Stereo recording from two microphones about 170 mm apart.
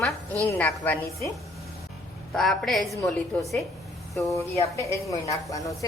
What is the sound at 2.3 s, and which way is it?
A woman's voice, centre (ahead or behind).